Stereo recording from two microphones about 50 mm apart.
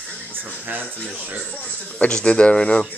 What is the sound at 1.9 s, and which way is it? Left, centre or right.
Speech, left.